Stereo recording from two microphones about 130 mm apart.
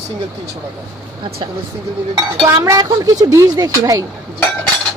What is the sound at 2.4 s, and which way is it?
Speech, 25° right (ahead or behind).